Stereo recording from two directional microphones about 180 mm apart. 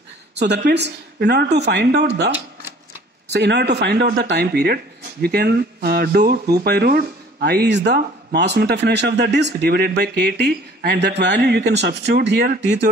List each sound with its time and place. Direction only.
0.7 s speech: 70° right (ahead or behind)
3.3 s speech: 70° right (ahead or behind)